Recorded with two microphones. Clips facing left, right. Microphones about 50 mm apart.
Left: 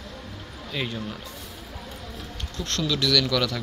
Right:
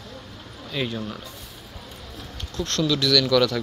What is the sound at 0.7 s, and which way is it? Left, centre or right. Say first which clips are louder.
Speech: right 3 dB; centre.